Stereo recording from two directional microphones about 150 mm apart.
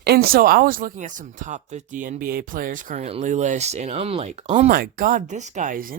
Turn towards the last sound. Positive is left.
turn(degrees=-65)  # may be behind; listen again after turning